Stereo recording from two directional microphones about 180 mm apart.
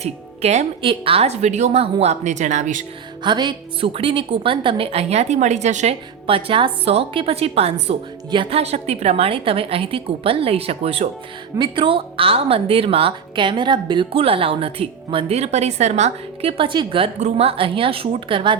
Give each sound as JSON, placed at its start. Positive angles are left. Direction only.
{"t": 0.0, "sound": "a woman's voice", "side_deg": -35}
{"t": 3.2, "sound": "a woman's voice", "side_deg": -25}